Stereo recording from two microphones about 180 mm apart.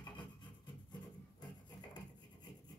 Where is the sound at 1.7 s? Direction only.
25° left (ahead or behind).